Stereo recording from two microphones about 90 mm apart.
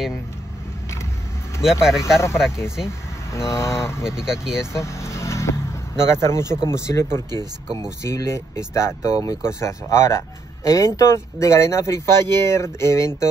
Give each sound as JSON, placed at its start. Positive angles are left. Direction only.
{"t": 1.6, "sound": "speech", "side_deg": -5}
{"t": 3.3, "sound": "speech", "side_deg": 30}
{"t": 4.0, "sound": "speech", "side_deg": -5}
{"t": 4.7, "sound": "vehicle", "side_deg": 35}
{"t": 6.7, "sound": "speech", "side_deg": 35}